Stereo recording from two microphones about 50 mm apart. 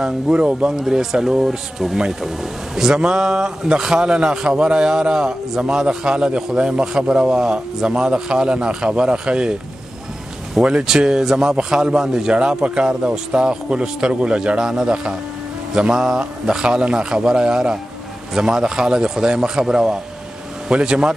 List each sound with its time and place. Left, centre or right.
0.0 s speech: centre
10.6 s speech: right